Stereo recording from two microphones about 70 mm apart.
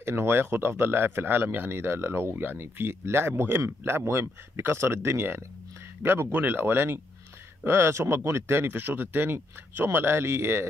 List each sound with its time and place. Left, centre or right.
0.0 s speech: right